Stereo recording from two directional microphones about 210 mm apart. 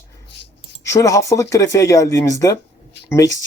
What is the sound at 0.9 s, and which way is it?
Speech, 15° left (ahead or behind).